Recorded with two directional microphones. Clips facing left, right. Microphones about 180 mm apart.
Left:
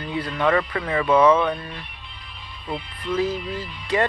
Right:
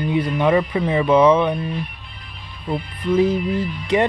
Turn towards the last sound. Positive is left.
turn(degrees=-20)  # may be behind; listen again after turning